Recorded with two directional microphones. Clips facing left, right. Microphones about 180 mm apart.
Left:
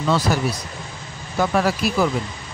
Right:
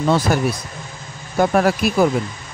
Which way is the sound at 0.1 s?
50° right (ahead or behind).